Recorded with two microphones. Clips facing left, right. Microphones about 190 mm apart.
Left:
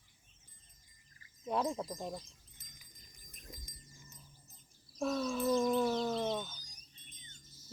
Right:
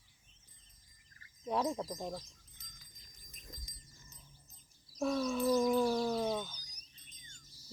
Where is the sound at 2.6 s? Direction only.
50° left (ahead or behind).